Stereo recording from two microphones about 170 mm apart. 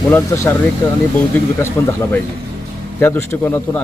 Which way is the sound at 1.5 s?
15° left (ahead or behind).